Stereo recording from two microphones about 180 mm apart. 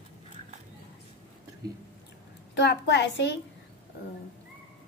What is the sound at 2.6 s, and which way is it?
Speech, 75° left (ahead or behind).